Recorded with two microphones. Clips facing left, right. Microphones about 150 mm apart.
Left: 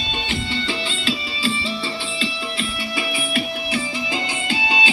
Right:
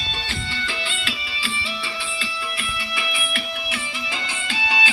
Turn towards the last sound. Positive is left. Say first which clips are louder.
# left 3 dB
turn(degrees=25)  # may be behind; listen again after turning